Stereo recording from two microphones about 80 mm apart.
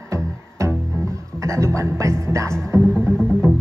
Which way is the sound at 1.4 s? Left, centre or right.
Right.